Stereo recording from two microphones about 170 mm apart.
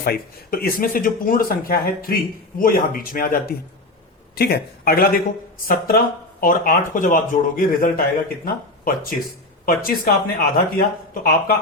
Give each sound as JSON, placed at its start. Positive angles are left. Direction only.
{"t": 0.0, "sound": "speech", "side_deg": 60}